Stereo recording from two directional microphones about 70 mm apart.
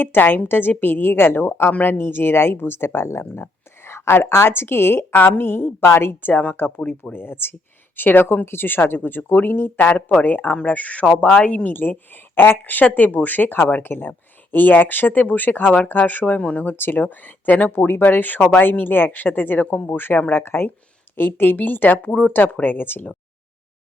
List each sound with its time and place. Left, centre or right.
0.0 s speech: left
16.7 s speech: left